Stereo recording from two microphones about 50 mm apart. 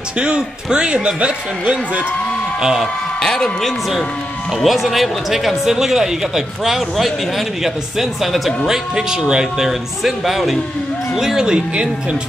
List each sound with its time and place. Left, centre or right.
0.2 s a man's voice: centre
2.6 s speech: centre
3.2 s speech: centre
4.6 s speech: centre